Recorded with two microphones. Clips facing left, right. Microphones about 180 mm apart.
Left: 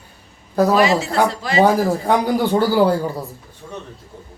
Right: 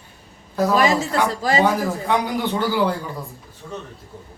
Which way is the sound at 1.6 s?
40° left (ahead or behind).